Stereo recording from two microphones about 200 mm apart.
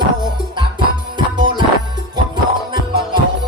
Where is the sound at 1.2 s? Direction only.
25° right (ahead or behind).